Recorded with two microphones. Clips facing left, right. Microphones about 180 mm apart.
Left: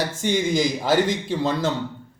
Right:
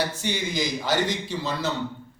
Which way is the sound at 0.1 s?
50° left (ahead or behind).